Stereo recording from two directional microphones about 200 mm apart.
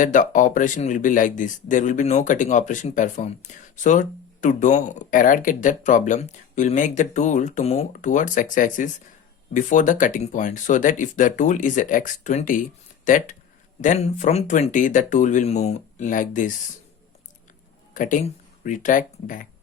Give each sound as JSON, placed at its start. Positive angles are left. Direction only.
{"t": 0.0, "sound": "speech", "side_deg": 40}
{"t": 17.9, "sound": "speech", "side_deg": 40}